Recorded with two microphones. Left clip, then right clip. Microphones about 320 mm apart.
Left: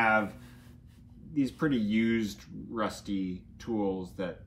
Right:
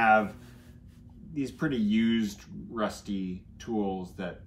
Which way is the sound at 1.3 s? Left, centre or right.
Centre.